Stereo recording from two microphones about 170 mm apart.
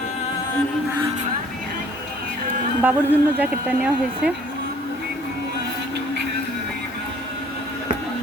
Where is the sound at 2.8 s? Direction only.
10° right (ahead or behind).